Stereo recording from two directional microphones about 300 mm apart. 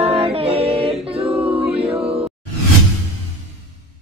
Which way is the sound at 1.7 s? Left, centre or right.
Centre.